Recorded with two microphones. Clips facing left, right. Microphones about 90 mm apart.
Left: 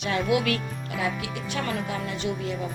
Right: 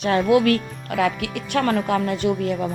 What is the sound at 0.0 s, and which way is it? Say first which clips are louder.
Speech: right 7 dB; 40° right (ahead or behind).